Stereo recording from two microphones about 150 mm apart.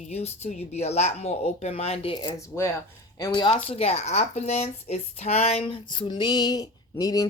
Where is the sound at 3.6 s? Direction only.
45° left (ahead or behind).